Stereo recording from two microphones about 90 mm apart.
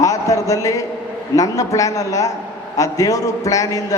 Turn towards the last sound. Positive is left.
turn(degrees=40)  # may be behind; listen again after turning